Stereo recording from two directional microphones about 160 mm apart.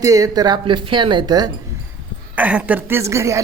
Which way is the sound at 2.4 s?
10° right (ahead or behind).